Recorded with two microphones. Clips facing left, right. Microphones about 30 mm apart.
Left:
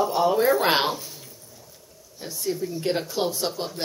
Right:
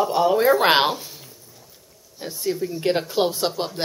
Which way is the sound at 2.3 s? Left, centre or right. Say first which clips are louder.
Right 2 dB; centre.